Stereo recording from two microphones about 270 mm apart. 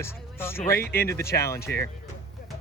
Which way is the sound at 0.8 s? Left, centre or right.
Left.